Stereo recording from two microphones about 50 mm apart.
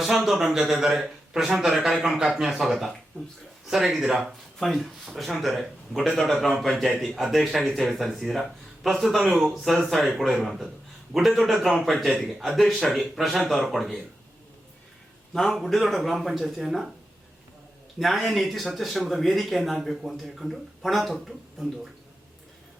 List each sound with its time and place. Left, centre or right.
0.0 s a man's voice: centre
4.6 s speech: centre
15.3 s speech: centre
18.0 s speech: centre